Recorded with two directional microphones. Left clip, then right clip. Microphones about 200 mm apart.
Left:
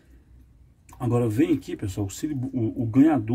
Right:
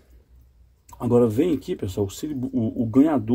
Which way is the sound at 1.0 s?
25° right (ahead or behind).